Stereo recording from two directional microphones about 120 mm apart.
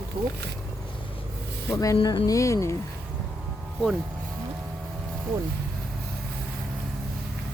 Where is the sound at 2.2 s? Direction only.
25° left (ahead or behind).